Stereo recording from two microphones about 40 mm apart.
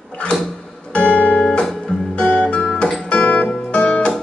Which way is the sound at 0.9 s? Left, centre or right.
Left.